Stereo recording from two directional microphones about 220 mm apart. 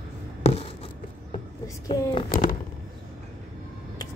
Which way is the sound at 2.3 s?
40° left (ahead or behind).